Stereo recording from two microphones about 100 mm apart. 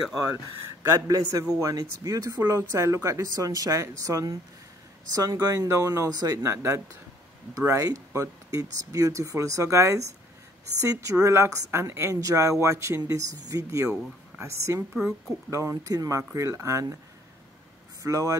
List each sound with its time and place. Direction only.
0.8 s a woman's voice: 35° right (ahead or behind)
15.0 s speech: 5° right (ahead or behind)
15.5 s a woman's voice: 30° right (ahead or behind)
18.0 s a woman's voice: 35° right (ahead or behind)